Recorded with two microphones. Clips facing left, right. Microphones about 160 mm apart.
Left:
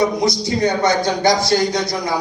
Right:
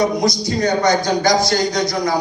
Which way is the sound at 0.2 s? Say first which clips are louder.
Left 1 dB; 25° left (ahead or behind).